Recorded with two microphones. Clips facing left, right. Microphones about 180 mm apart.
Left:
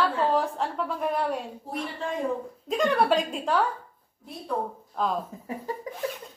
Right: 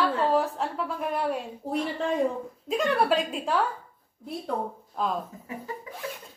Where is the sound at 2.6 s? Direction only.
Centre (ahead or behind).